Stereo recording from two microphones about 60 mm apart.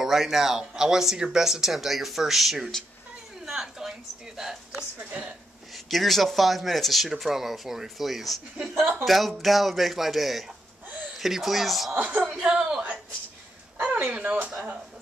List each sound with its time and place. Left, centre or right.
0.0 s a woman's voice: centre
5.9 s speech: centre
12.0 s speech: right
12.4 s a woman's voice: centre; by 14.5 s right